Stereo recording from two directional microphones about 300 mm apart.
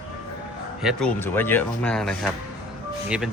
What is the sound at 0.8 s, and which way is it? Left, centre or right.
Speech, centre.